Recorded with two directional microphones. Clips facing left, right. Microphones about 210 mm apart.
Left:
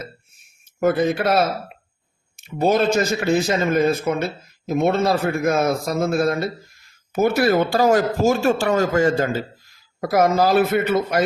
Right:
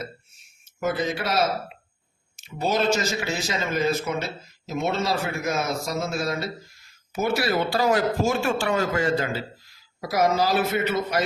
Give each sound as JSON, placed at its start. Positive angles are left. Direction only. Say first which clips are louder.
{"t": 0.8, "sound": "a man's voice", "louder": "left 7 dB", "side_deg": 55}